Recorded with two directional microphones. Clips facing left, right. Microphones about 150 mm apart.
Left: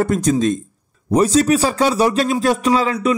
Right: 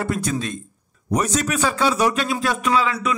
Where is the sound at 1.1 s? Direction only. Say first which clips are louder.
Left 8 dB; 30° left (ahead or behind).